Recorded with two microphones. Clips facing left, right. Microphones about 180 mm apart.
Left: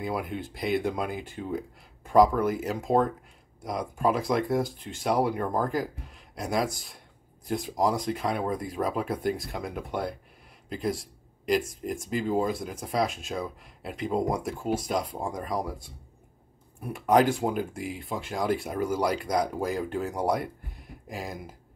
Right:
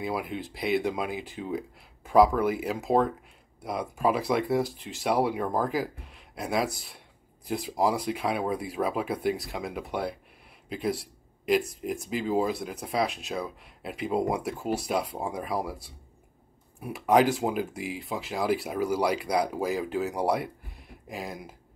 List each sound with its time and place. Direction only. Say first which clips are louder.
0.0 s speech: even; centre (ahead or behind)
16.8 s speech: even; centre (ahead or behind)